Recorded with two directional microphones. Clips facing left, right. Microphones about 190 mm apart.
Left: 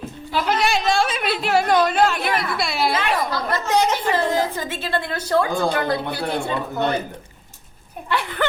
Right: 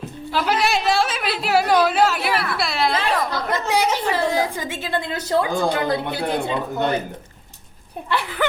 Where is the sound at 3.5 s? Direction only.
10° right (ahead or behind).